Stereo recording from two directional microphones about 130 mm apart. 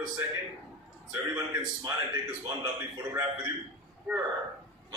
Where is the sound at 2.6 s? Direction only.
25° right (ahead or behind).